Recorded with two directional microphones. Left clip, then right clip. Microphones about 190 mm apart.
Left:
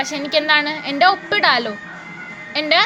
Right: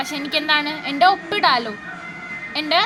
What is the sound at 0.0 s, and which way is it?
A woman's voice, 10° left (ahead or behind).